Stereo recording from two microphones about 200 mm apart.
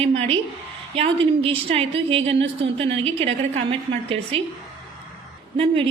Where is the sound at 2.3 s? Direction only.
65° right (ahead or behind).